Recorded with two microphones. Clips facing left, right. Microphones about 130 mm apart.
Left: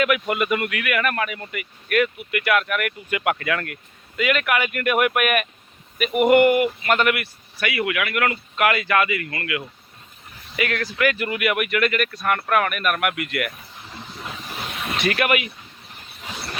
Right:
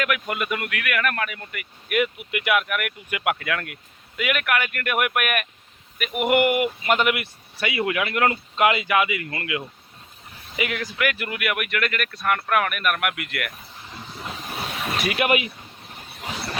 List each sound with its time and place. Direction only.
0.0 s speech: 5° left (ahead or behind)
1.9 s speech: 15° right (ahead or behind); by 13.5 s centre (ahead or behind)
14.9 s speech: 10° right (ahead or behind)
15.2 s speech: 25° right (ahead or behind)